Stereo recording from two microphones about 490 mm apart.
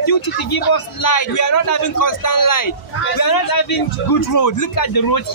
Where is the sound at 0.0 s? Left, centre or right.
Left.